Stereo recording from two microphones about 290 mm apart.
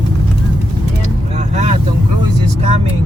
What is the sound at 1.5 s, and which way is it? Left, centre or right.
Vehicle, right.